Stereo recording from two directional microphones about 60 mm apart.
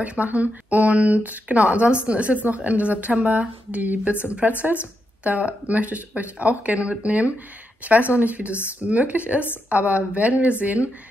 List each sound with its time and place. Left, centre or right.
0.0 s speech: right